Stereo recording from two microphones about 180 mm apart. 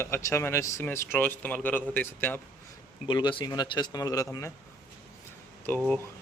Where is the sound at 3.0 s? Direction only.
25° left (ahead or behind).